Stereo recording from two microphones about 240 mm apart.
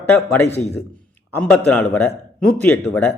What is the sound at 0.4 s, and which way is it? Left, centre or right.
Speech, left.